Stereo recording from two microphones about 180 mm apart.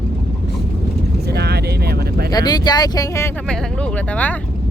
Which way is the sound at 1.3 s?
65° right (ahead or behind).